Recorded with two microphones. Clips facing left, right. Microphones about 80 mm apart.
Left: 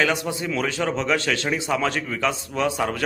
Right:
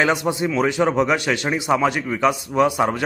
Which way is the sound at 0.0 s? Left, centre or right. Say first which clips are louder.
Right 4 dB; right.